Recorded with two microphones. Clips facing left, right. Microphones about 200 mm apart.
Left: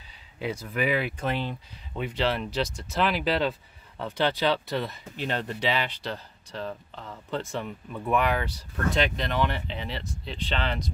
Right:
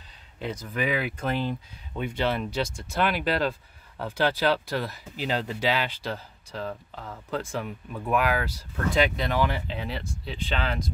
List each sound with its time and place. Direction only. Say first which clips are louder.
0.4 s speech: left 1 dB; 5° left (ahead or behind)